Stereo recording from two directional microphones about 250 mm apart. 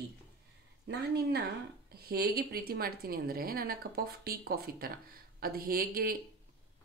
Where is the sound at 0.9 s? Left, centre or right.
Right.